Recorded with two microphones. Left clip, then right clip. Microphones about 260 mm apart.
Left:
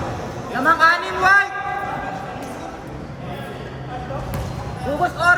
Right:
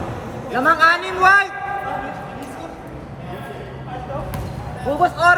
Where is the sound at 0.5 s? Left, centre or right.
Right.